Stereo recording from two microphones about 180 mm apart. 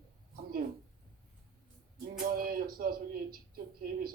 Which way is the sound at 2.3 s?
55° right (ahead or behind).